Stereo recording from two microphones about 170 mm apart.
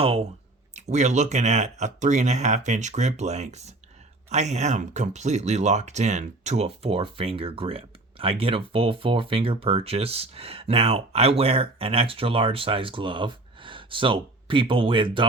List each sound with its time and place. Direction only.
0.0 s speech: 35° right (ahead or behind)